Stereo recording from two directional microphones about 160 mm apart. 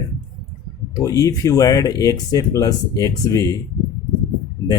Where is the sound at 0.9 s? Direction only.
20° left (ahead or behind).